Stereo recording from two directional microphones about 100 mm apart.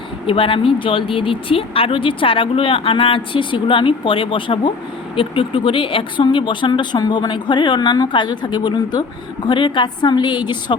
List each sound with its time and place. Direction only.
0.3 s speech: 65° left (ahead or behind)